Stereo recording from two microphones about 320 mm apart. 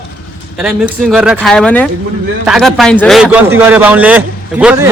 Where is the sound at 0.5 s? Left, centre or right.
Centre.